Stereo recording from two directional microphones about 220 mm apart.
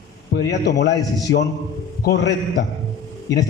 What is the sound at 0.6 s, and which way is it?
A man's voice, 50° left (ahead or behind).